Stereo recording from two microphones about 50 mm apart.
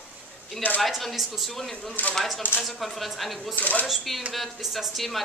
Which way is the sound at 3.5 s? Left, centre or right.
Left.